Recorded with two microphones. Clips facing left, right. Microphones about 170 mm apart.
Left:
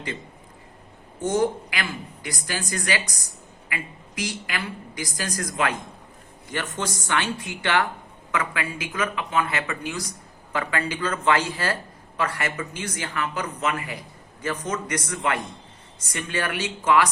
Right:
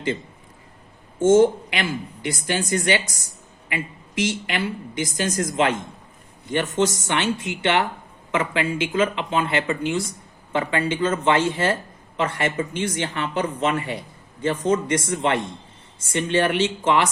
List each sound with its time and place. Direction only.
1.2 s speech: 25° right (ahead or behind)